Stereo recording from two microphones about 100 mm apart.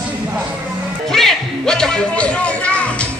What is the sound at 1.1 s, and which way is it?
Music, 5° left (ahead or behind).